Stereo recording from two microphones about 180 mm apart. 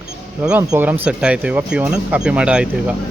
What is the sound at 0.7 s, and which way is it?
Speech, 10° right (ahead or behind).